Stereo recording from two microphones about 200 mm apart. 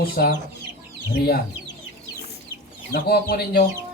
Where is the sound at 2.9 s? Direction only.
50° left (ahead or behind).